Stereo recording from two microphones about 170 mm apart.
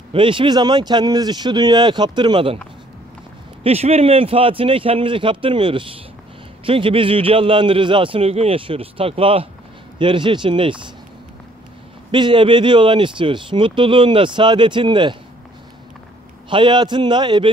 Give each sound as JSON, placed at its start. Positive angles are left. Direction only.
{"t": 0.1, "sound": "speech", "side_deg": -30}
{"t": 3.6, "sound": "a man's voice", "side_deg": -35}
{"t": 12.1, "sound": "speech", "side_deg": -25}
{"t": 16.4, "sound": "speech", "side_deg": -30}